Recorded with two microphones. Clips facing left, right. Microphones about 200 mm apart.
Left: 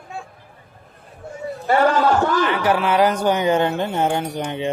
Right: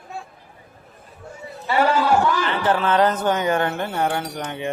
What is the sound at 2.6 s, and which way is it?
Speech, 10° left (ahead or behind).